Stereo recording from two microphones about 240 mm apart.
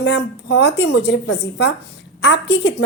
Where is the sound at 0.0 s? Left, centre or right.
Left.